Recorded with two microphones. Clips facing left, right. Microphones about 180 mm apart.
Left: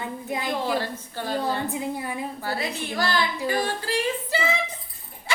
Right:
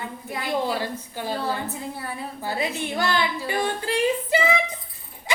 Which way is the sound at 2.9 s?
20° right (ahead or behind).